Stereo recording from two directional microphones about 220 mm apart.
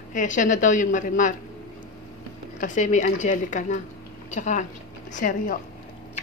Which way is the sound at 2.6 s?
35° left (ahead or behind).